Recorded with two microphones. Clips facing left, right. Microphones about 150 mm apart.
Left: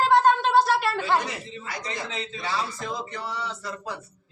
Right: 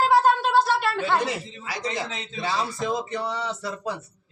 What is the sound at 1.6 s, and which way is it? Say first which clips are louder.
A man's voice: right 5 dB; 90° right.